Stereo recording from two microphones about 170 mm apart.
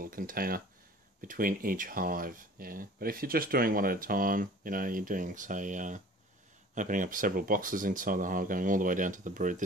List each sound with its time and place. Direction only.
0.0 s speech: 55° right (ahead or behind)